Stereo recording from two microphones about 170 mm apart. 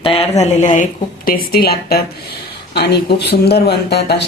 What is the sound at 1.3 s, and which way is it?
A woman's voice, 60° left (ahead or behind).